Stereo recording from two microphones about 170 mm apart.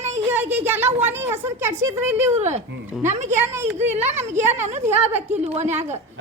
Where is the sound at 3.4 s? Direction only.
15° right (ahead or behind).